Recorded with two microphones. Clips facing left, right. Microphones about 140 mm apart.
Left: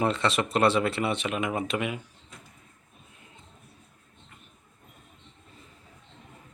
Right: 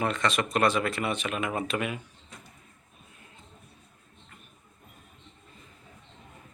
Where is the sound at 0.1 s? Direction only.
30° left (ahead or behind).